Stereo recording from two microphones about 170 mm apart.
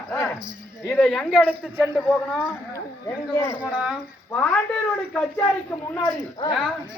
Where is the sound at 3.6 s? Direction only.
5° right (ahead or behind).